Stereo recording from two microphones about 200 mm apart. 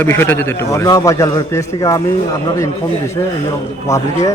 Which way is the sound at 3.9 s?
15° left (ahead or behind).